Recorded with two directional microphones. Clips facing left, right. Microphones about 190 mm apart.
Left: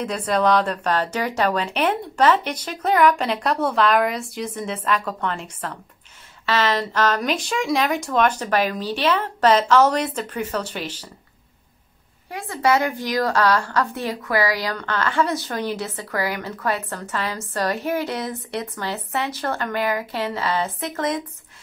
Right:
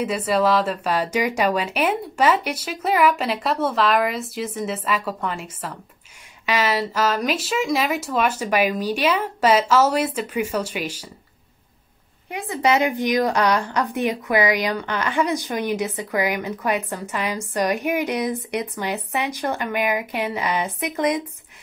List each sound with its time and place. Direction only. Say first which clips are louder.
0.0 s a woman's voice: right 1 dB; 5° right (ahead or behind)
12.3 s a woman's voice: even; 20° right (ahead or behind)